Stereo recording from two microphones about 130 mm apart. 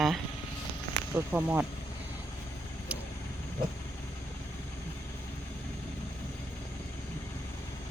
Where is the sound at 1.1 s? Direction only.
10° right (ahead or behind).